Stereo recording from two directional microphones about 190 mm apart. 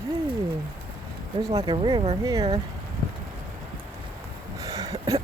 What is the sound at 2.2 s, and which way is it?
Speech, 15° right (ahead or behind).